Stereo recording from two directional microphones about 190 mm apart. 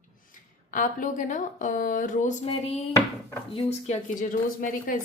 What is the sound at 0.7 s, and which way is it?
Speech, 45° left (ahead or behind).